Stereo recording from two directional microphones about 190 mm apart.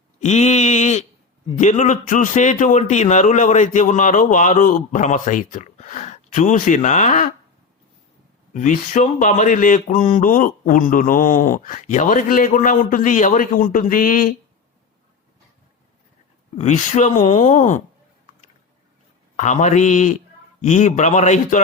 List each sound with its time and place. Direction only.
0.2 s a sound: 35° left (ahead or behind)
1.5 s a man's voice: 40° left (ahead or behind)
8.5 s mantra: 40° left (ahead or behind)
16.6 s a man's voice: 40° left (ahead or behind)
19.4 s a man's voice: 40° left (ahead or behind)